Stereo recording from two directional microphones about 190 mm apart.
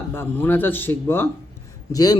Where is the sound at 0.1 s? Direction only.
10° left (ahead or behind).